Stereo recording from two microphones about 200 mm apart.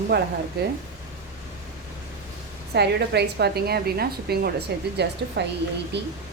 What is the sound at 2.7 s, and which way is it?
A woman's voice, 55° right (ahead or behind).